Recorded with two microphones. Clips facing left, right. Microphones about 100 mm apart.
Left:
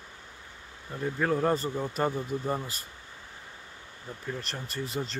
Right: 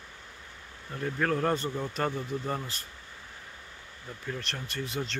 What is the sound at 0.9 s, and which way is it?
A man's voice, 10° left (ahead or behind).